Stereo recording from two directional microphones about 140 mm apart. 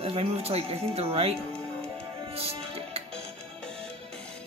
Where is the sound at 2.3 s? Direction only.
45° right (ahead or behind).